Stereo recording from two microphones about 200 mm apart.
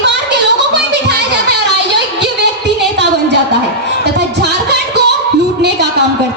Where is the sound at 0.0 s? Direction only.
60° right (ahead or behind).